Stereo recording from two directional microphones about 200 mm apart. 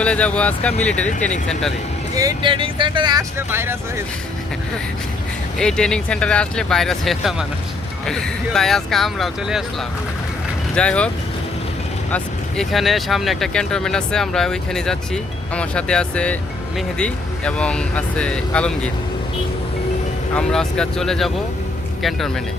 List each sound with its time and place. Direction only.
0.0 s speech: 5° left (ahead or behind)
2.1 s speech: 20° right (ahead or behind)
5.5 s speech: 5° left (ahead or behind)
12.1 s speech: centre (ahead or behind)
20.3 s speech: 5° left (ahead or behind)